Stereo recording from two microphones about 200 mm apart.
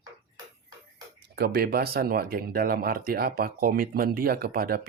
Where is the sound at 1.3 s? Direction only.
50° right (ahead or behind).